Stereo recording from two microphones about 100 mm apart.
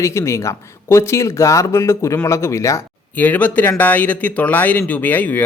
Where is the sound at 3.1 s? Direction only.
15° left (ahead or behind).